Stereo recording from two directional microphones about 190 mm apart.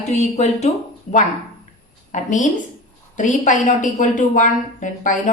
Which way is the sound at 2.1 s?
40° left (ahead or behind).